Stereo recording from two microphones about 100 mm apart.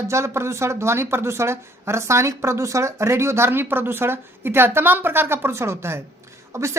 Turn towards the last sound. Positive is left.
turn(degrees=-30)  # may be behind; listen again after turning